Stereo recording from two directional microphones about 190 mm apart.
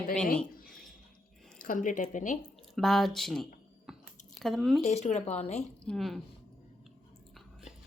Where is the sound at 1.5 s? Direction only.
45° left (ahead or behind).